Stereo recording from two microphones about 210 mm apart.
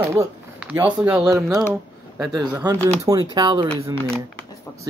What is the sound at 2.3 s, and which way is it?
Speech, 20° right (ahead or behind).